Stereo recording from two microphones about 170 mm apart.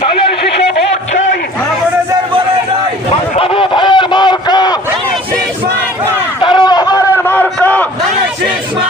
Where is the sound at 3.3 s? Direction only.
35° left (ahead or behind).